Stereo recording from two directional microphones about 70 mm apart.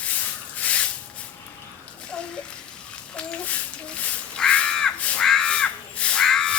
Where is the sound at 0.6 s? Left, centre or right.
Centre.